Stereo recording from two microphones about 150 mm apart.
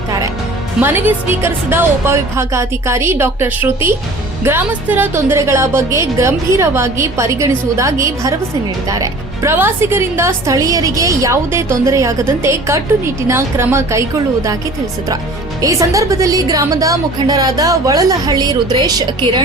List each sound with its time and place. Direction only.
0.8 s a woman's voice: 15° right (ahead or behind)
15.6 s a woman's voice: 20° right (ahead or behind)